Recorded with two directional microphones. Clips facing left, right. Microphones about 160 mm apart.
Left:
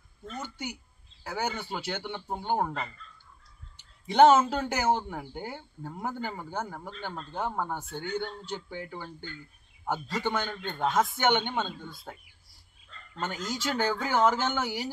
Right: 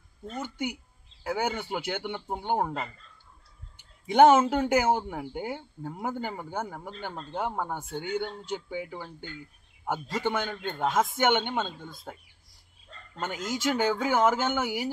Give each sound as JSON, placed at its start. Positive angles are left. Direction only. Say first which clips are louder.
{"t": 1.2, "sound": "speech", "louder": "right 3 dB", "side_deg": -10}
{"t": 4.1, "sound": "a man's voice", "louder": "right 1 dB", "side_deg": -15}
{"t": 12.9, "sound": "bow-wow", "louder": "right 3 dB", "side_deg": -40}
{"t": 13.4, "sound": "speech", "louder": "right 2 dB", "side_deg": -50}
{"t": 13.7, "sound": "speech", "louder": "right 3 dB", "side_deg": -10}